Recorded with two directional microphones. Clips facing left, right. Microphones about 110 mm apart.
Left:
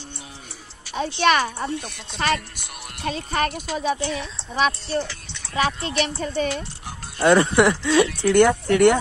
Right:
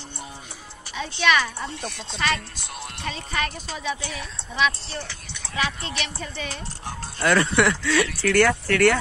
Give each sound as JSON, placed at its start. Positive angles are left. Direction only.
{"t": 0.9, "sound": "speech", "side_deg": 45}
{"t": 4.1, "sound": "speech", "side_deg": 30}
{"t": 7.2, "sound": "speech", "side_deg": 25}